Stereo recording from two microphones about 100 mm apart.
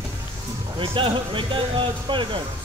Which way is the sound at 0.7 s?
55° right (ahead or behind).